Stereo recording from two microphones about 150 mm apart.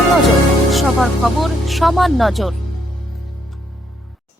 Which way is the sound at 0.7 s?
Centre (ahead or behind).